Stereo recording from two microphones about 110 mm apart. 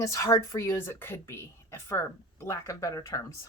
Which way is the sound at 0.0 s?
25° left (ahead or behind).